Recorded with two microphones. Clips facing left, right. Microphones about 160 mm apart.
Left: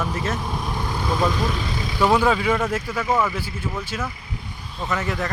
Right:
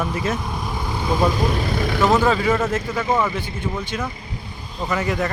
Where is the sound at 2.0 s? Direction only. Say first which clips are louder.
Even; 10° left (ahead or behind).